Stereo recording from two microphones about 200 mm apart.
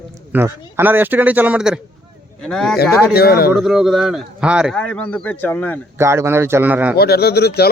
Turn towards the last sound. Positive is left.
turn(degrees=55)  # may be behind; listen again after turning